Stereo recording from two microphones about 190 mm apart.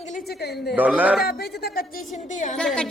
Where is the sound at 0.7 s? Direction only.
10° right (ahead or behind).